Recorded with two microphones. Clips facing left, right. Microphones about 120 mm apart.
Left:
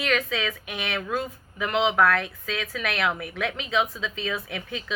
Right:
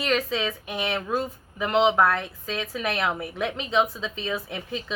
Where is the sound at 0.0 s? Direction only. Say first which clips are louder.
Right 1 dB; 30° right (ahead or behind).